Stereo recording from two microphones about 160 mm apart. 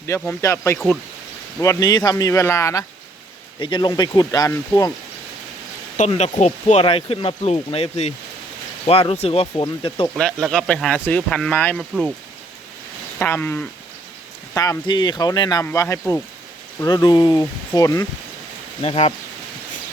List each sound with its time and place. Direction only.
0.1 s speech: 15° left (ahead or behind)
3.6 s speech: 30° left (ahead or behind)
6.1 s speech: 40° left (ahead or behind)
10.2 s speech: 5° left (ahead or behind)
13.1 s speech: 10° left (ahead or behind)
18.8 s speech: 40° left (ahead or behind)